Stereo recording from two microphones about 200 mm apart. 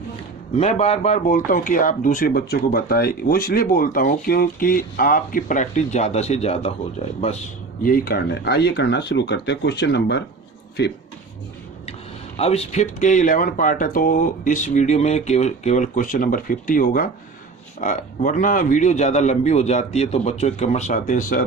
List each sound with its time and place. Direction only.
0.5 s speech: 35° left (ahead or behind)
7.9 s speech: 45° left (ahead or behind)
12.4 s speech: 30° left (ahead or behind)